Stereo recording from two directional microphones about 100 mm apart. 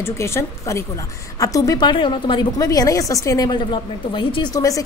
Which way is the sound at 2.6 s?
35° left (ahead or behind).